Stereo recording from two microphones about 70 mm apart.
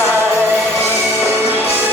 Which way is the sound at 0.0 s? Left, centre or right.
Right.